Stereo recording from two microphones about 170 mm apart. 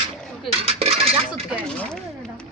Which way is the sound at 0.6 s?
35° right (ahead or behind).